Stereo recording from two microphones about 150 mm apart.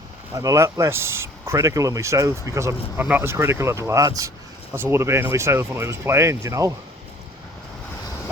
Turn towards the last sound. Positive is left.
turn(degrees=-20)  # may be behind; listen again after turning